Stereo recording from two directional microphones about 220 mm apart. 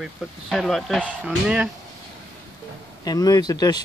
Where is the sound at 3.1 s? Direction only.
15° left (ahead or behind).